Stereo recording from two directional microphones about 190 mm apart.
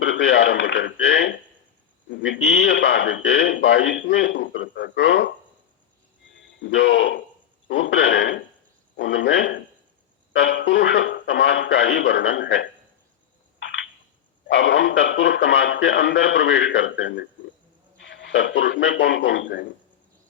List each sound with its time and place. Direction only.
0.0 s a man's voice: 75° left (ahead or behind)
6.6 s a man's voice: 75° left (ahead or behind)
7.7 s a man's voice: 85° left
14.4 s a man's voice: 70° left (ahead or behind)